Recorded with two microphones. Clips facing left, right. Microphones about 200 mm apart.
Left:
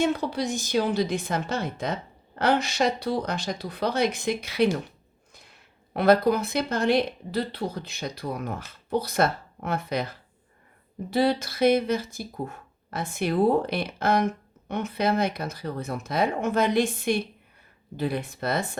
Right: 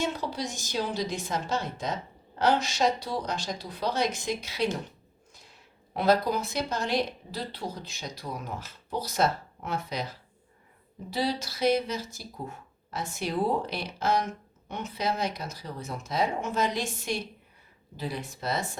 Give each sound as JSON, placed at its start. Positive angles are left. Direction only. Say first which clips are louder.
{"t": 0.0, "sound": "speech", "louder": "left 6 dB", "side_deg": 55}